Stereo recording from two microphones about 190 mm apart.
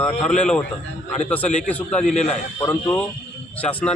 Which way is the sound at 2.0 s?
35° left (ahead or behind).